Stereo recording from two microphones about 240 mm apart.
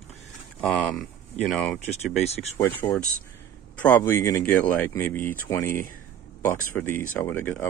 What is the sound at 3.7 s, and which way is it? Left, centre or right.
Speech, centre.